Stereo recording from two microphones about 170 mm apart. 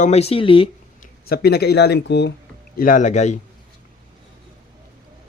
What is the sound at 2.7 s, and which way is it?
Speech, 55° left (ahead or behind).